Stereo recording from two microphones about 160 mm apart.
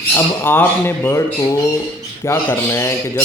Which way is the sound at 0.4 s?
15° left (ahead or behind).